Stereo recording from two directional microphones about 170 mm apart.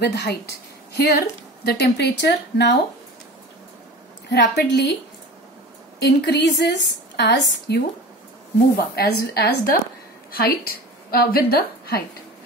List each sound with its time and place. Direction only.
0.0 s a woman's voice: 75° left (ahead or behind)
4.3 s a woman's voice: 85° left
5.9 s a woman's voice: 80° left
8.7 s a woman's voice: 65° left (ahead or behind)